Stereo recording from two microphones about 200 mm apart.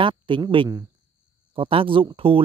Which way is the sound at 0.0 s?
25° right (ahead or behind).